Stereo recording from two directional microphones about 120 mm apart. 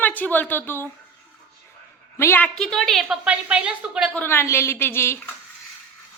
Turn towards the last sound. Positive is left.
turn(degrees=20)  # may be behind; listen again after turning